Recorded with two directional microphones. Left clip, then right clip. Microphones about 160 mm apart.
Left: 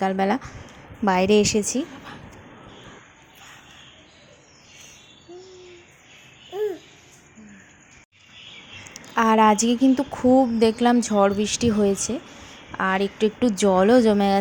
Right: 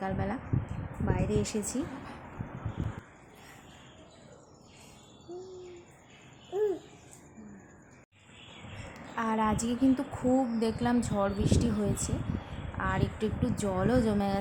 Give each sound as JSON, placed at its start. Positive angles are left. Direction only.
{"t": 0.0, "sound": "a woman's voice", "side_deg": 45}
{"t": 8.9, "sound": "a woman's voice", "side_deg": 50}